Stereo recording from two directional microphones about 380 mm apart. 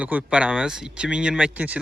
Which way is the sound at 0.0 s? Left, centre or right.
Centre.